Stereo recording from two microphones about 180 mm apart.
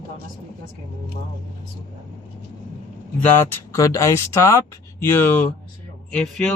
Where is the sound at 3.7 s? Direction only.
15° left (ahead or behind).